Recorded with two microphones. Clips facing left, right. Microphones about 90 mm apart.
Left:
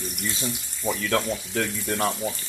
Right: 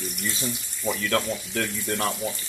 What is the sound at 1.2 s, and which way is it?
Speech, 10° left (ahead or behind).